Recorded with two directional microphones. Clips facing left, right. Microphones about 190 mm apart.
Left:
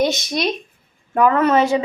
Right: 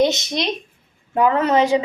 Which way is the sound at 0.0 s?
20° right (ahead or behind).